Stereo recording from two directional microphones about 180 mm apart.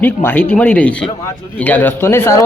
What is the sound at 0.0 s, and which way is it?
Speech, 10° left (ahead or behind).